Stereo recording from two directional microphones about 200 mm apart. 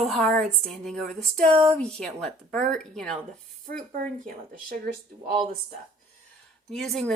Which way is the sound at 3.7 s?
45° right (ahead or behind).